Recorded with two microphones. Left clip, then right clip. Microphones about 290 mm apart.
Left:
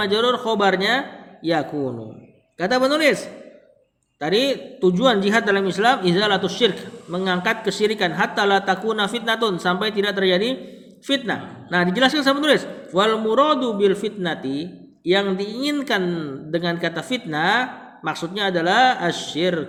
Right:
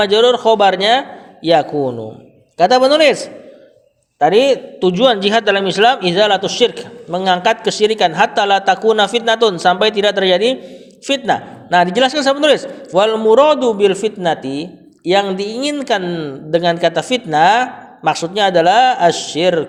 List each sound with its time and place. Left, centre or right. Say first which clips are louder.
0.0 s a man's voice: right 9 dB; centre